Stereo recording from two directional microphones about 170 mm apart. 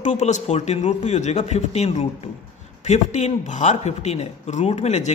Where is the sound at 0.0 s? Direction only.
45° left (ahead or behind).